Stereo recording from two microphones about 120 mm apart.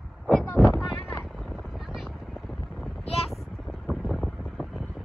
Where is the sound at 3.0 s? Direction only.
60° left (ahead or behind).